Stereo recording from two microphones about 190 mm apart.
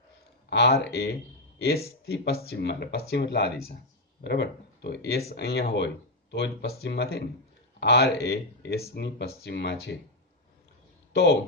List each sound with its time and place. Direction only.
0.5 s speech: 60° left (ahead or behind)